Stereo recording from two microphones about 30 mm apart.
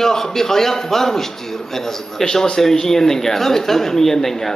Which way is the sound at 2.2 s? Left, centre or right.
Left.